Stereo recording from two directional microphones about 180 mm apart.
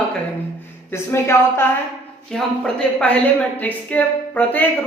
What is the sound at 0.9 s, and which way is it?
Speech, 15° left (ahead or behind).